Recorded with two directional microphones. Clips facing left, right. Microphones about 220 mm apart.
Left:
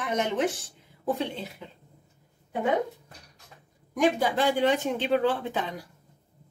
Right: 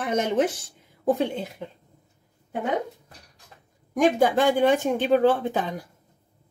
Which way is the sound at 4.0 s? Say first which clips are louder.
Right 4 dB; 50° right (ahead or behind).